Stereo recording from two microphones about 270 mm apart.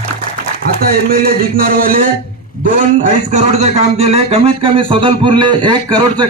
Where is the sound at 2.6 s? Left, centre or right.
Right.